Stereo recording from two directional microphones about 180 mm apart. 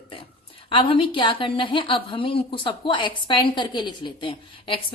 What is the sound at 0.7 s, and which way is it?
A woman's voice, 30° left (ahead or behind).